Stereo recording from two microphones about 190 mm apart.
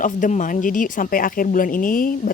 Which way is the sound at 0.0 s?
45° left (ahead or behind).